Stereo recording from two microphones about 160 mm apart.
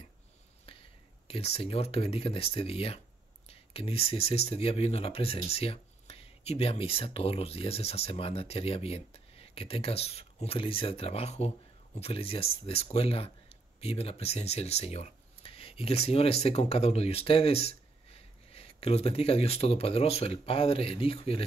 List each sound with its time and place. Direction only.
1.2 s speech: 40° left (ahead or behind)